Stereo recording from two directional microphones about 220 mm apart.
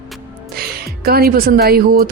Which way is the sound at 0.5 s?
45° right (ahead or behind).